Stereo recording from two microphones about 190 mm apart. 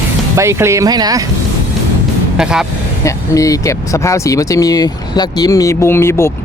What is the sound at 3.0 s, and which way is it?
Speech, 15° left (ahead or behind).